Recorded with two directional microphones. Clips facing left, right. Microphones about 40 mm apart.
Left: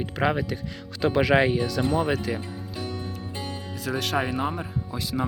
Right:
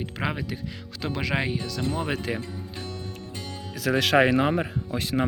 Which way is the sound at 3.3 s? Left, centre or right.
Left.